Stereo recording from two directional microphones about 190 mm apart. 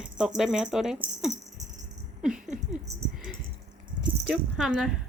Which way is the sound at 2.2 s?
5° right (ahead or behind).